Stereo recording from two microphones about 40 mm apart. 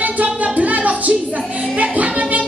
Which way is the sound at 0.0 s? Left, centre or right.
Right.